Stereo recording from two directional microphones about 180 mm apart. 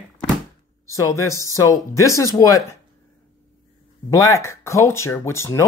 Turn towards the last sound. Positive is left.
turn(degrees=15)  # may be behind; listen again after turning